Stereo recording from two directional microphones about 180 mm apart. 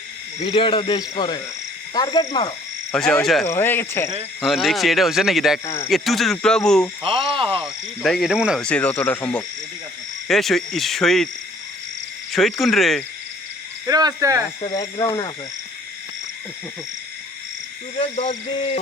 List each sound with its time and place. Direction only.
0.3 s speech: 30° left (ahead or behind)
2.9 s speech: 5° left (ahead or behind)
3.4 s speech: 15° left (ahead or behind)
4.4 s speech: centre (ahead or behind)
7.0 s frog: 30° right (ahead or behind)
7.6 s speech: centre (ahead or behind)
12.3 s speech: centre (ahead or behind)
13.8 s cricket: 20° right (ahead or behind)
14.7 s speech: 20° left (ahead or behind)
17.9 s a sound: 40° left (ahead or behind)